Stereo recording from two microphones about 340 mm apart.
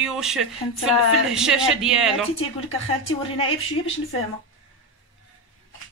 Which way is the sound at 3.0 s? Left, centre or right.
Centre.